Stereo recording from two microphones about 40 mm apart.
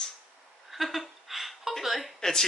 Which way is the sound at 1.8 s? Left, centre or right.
Centre.